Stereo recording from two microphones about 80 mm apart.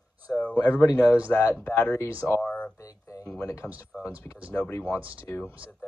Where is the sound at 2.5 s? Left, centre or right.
Centre.